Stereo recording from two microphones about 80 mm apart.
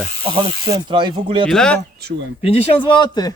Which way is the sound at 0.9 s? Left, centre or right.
Right.